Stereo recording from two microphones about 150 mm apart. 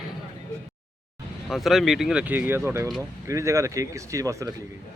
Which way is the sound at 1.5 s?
Centre (ahead or behind).